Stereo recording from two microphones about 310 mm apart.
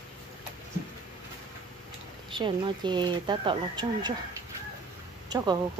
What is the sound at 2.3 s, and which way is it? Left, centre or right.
Speech, centre.